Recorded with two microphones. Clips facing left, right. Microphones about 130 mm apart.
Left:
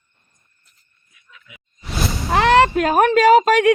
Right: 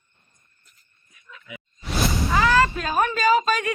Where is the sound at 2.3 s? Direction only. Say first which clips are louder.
Left 7 dB; 70° left (ahead or behind).